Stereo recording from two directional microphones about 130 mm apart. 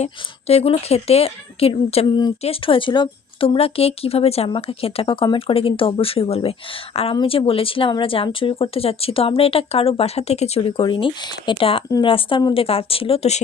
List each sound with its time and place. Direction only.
0.0 s a woman's voice: 50° left (ahead or behind)